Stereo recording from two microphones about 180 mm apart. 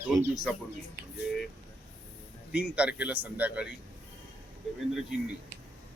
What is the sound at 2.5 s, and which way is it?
Speech, 5° right (ahead or behind).